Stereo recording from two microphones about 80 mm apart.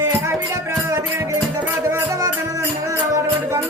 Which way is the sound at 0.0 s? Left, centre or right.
Right.